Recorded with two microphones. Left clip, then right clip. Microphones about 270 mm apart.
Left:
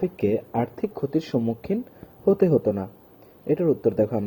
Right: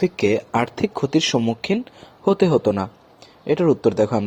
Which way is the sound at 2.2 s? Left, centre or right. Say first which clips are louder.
Right 3 dB; right.